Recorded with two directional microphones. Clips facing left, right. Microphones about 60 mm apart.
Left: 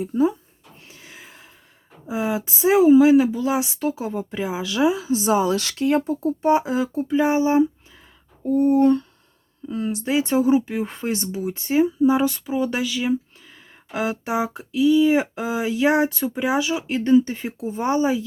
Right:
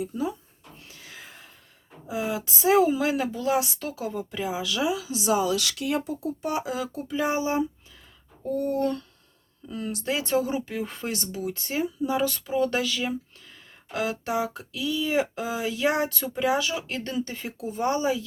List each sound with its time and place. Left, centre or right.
0.0 s speech: left
0.9 s a sound: left
1.2 s gasp: centre
2.0 s a woman's voice: left